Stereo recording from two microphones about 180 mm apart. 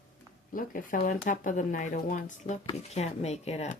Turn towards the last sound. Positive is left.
turn(degrees=35)  # may be behind; listen again after turning